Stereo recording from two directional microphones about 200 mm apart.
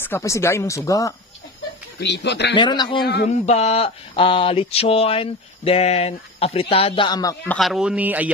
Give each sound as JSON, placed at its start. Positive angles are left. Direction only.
{"t": 0.0, "sound": "speech", "side_deg": 15}
{"t": 2.0, "sound": "speech", "side_deg": 60}
{"t": 2.5, "sound": "mantra", "side_deg": 20}
{"t": 3.3, "sound": "mantra", "side_deg": 35}
{"t": 7.4, "sound": "speech", "side_deg": 0}